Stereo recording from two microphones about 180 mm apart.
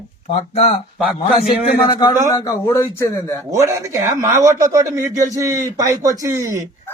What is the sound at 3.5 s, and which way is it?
A man's voice, 15° right (ahead or behind).